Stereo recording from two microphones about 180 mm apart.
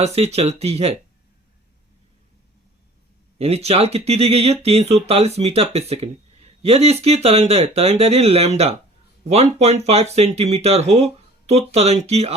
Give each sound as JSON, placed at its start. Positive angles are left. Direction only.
{"t": 0.0, "sound": "speech", "side_deg": -35}
{"t": 3.3, "sound": "speech", "side_deg": -35}